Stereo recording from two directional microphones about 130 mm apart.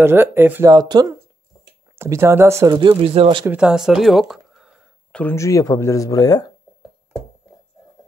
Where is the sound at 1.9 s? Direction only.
20° right (ahead or behind).